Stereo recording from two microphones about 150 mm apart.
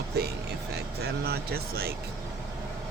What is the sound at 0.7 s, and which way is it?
Speech, 90° right.